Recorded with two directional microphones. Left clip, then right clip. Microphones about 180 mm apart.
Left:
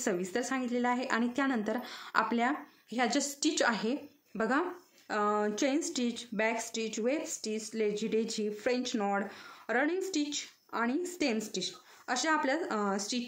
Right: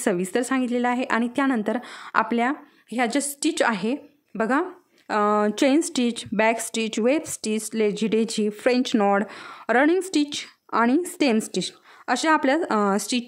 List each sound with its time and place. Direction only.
0.0 s a woman's voice: 50° right (ahead or behind)